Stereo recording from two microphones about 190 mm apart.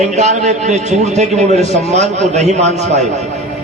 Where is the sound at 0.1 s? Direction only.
35° right (ahead or behind).